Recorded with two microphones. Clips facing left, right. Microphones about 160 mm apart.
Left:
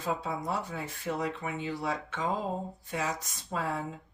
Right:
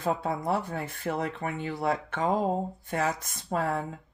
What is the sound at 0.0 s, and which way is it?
Speech, 55° right (ahead or behind).